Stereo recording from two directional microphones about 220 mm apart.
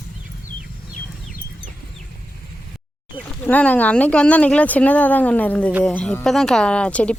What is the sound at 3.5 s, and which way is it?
Speech, 5° left (ahead or behind).